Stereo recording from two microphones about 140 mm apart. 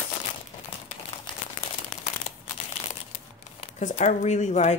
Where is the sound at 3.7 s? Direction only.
55° left (ahead or behind).